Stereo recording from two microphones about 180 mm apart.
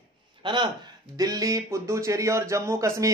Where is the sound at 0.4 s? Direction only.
25° right (ahead or behind).